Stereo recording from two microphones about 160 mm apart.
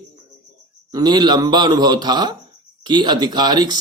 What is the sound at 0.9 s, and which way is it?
Speech, 25° right (ahead or behind).